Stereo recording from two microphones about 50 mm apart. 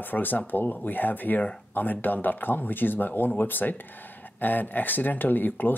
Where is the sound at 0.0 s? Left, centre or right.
Left.